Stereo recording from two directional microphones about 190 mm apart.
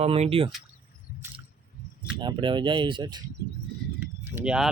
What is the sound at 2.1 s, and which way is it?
Speech, 25° right (ahead or behind).